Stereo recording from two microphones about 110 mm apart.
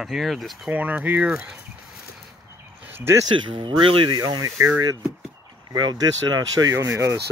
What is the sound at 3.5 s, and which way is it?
Speech, 50° right (ahead or behind).